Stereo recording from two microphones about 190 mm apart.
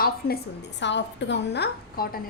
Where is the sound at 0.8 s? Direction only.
70° left (ahead or behind); by 2.2 s 50° left (ahead or behind).